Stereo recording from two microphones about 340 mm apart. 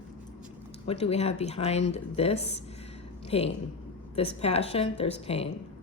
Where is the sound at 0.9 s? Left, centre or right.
Centre.